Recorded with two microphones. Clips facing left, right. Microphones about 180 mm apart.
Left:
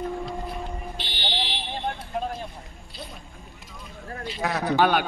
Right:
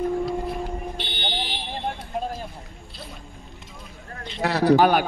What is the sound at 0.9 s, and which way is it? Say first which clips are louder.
Fire alarm: right 2 dB; 55° right (ahead or behind).